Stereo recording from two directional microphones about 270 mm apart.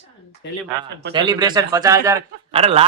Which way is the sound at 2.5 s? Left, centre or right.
Right.